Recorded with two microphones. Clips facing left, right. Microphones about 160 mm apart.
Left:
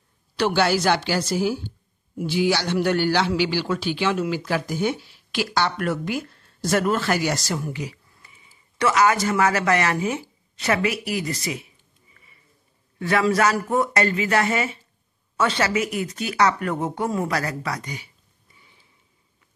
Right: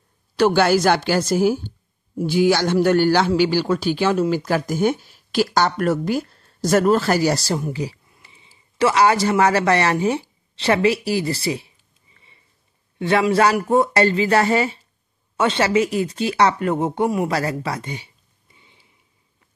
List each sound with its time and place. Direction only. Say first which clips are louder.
0.4 s a man's voice: right 5 dB; 45° right (ahead or behind)
10.5 s a sound: right 5 dB; 30° right (ahead or behind)
13.0 s a man's voice: right 3 dB; 25° right (ahead or behind)